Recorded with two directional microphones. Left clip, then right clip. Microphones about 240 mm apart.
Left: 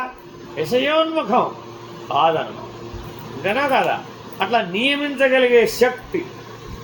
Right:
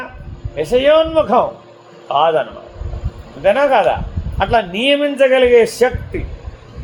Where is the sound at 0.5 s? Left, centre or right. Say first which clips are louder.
Right 6 dB; right.